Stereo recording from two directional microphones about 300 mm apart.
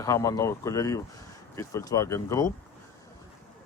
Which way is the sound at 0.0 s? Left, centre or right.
Centre.